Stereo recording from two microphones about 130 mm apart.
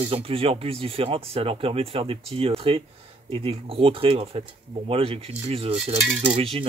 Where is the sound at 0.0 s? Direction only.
45° right (ahead or behind).